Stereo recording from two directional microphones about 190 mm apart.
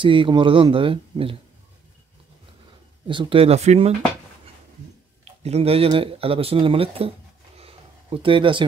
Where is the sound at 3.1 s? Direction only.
25° right (ahead or behind).